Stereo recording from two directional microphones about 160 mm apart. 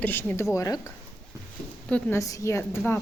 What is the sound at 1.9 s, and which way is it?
A woman's voice, 15° left (ahead or behind).